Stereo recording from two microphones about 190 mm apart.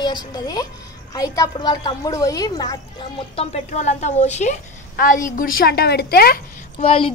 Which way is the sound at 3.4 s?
35° left (ahead or behind).